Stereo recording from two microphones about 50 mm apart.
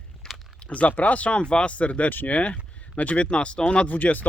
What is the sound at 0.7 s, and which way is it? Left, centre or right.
Speech, left.